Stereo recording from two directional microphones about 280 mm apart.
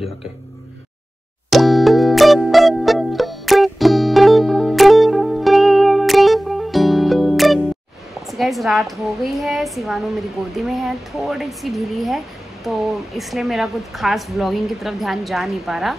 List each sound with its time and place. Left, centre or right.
1.5 s music: centre
8.1 s a woman's voice: centre